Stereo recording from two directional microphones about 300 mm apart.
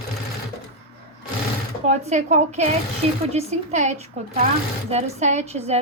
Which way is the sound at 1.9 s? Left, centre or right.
Right.